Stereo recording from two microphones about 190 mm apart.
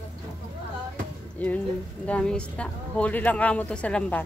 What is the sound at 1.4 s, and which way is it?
Speech, 10° left (ahead or behind).